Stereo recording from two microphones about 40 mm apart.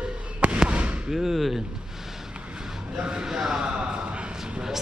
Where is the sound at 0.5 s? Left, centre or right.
Right.